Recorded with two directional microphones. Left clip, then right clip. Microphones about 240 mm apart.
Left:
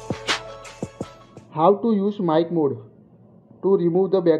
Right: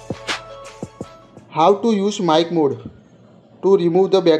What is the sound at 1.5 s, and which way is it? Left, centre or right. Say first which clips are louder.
Speech: right 3 dB; centre.